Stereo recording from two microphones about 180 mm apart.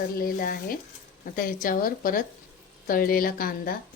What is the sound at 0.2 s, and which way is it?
A woman's voice, 50° left (ahead or behind).